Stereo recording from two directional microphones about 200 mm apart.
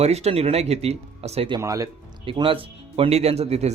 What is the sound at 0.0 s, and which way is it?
Speech, 30° right (ahead or behind).